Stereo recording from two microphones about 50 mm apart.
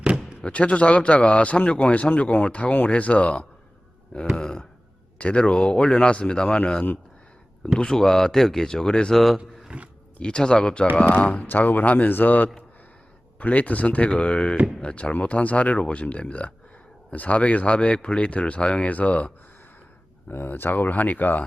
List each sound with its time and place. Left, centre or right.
0.4 s speech: left
9.1 s a man's voice: centre
9.6 s roaring cats: right
10.2 s speech: centre
11.4 s speech: left
20.2 s speech: left